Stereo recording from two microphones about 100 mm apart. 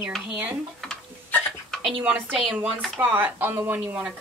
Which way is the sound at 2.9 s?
20° right (ahead or behind).